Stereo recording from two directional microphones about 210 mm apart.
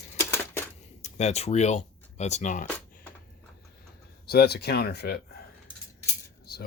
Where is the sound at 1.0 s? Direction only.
30° left (ahead or behind).